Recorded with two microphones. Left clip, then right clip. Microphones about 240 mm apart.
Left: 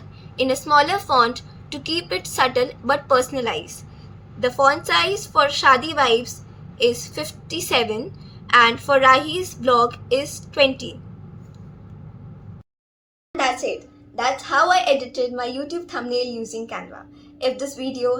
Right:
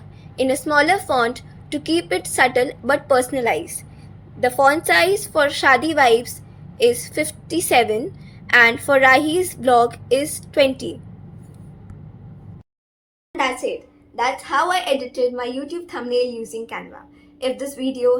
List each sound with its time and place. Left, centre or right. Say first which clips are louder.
0.4 s a woman's voice: even; centre
7.4 s a woman's voice: right 4 dB; centre
13.3 s a sound: even; centre
14.2 s a woman's voice: left 1 dB; centre